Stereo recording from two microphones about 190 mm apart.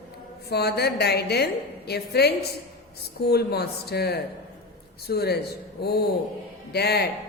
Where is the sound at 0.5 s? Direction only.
55° left (ahead or behind).